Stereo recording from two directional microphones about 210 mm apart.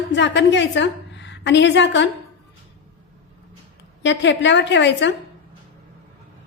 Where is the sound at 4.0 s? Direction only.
60° left (ahead or behind).